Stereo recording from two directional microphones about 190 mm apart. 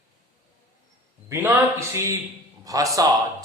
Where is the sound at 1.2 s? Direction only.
15° right (ahead or behind).